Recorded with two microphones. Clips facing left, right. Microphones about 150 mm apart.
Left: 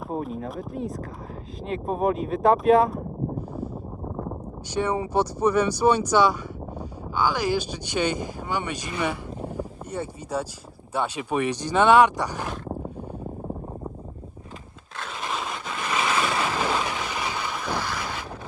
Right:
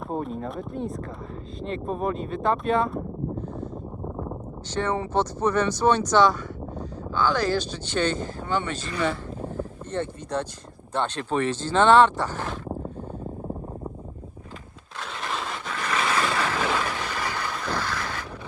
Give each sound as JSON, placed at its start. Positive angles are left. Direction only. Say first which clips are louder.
{"t": 0.1, "sound": "speech", "louder": "even", "side_deg": 5}
{"t": 4.7, "sound": "speech", "louder": "left 1 dB", "side_deg": 10}
{"t": 15.2, "sound": "vehicle", "louder": "left 1 dB", "side_deg": 15}
{"t": 16.7, "sound": "a sound", "louder": "even", "side_deg": 15}